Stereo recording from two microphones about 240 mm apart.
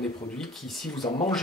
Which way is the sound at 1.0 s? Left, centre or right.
Centre.